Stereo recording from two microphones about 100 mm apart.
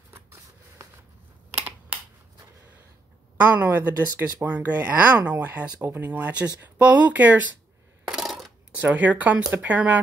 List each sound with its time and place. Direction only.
0.1 s shuffling cards: 25° right (ahead or behind)
3.3 s speech: 15° right (ahead or behind)
8.1 s coin: 5° right (ahead or behind)
8.7 s speech: 15° right (ahead or behind)